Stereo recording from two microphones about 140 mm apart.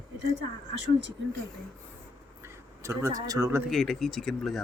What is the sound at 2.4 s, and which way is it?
Speech, 20° right (ahead or behind).